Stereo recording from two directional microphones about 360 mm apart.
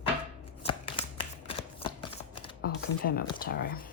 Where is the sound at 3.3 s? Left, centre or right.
Left.